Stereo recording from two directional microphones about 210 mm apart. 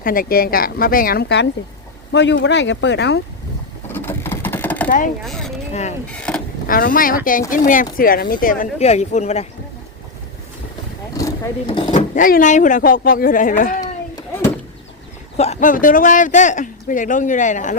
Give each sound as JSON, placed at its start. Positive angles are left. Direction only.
{"t": 0.0, "sound": "speech", "side_deg": 45}
{"t": 3.8, "sound": "vehicle", "side_deg": 10}
{"t": 4.9, "sound": "speech", "side_deg": 40}
{"t": 5.2, "sound": "speech", "side_deg": 0}
{"t": 6.7, "sound": "speech", "side_deg": 40}
{"t": 11.1, "sound": "a sound", "side_deg": 15}
{"t": 11.9, "sound": "speech", "side_deg": 35}
{"t": 13.8, "sound": "a sound", "side_deg": 15}
{"t": 15.4, "sound": "speech", "side_deg": 35}